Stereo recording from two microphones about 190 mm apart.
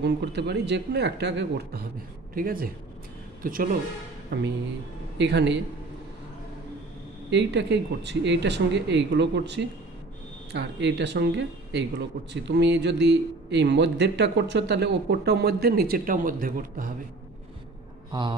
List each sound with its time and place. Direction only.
0.0 s speech: 60° right (ahead or behind)
2.3 s speech: 50° right (ahead or behind)
4.3 s speech: 65° right (ahead or behind)
7.2 s speech: 65° right (ahead or behind); by 16.9 s 45° right (ahead or behind)